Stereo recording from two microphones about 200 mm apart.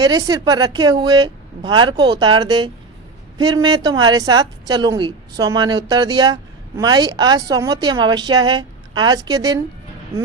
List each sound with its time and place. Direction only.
0.0 s speech: 20° right (ahead or behind)